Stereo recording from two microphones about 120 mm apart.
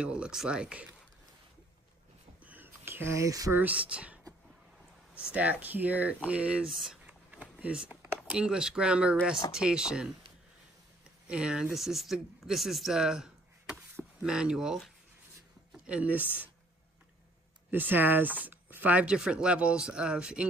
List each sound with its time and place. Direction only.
0.0 s speech: 10° right (ahead or behind)
2.4 s a sound: 15° right (ahead or behind)
3.5 s speech: 10° right (ahead or behind)
7.1 s a sound: 10° right (ahead or behind)
8.2 s speech: 5° right (ahead or behind)
11.2 s speech: 10° right (ahead or behind)
15.9 s speech: 10° right (ahead or behind)
17.6 s speech: 15° right (ahead or behind)